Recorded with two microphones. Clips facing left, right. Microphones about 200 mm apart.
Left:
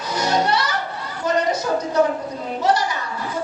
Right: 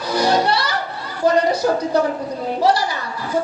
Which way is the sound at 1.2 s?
35° right (ahead or behind).